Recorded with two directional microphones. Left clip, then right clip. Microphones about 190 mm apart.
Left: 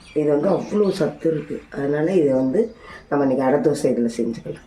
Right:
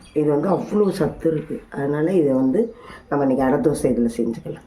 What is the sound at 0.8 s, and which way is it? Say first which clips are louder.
Speech: even; 10° right (ahead or behind).